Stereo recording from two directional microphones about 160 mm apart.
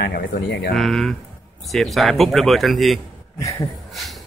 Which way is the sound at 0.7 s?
Centre (ahead or behind).